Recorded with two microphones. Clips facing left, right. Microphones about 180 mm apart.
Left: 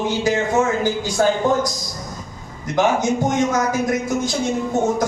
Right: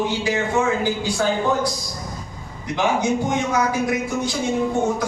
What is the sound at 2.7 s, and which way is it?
A man's voice, 45° left (ahead or behind).